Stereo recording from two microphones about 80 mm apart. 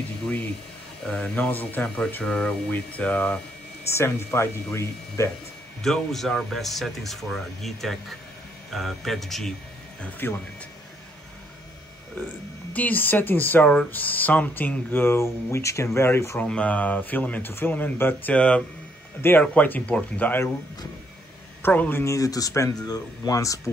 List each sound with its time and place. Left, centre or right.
1.0 s speech: centre
2.2 s speech: centre
3.9 s speech: left
5.8 s speech: centre
10.0 s speech: left
12.7 s speech: left
16.3 s speech: centre
21.6 s speech: left
22.0 s speech: left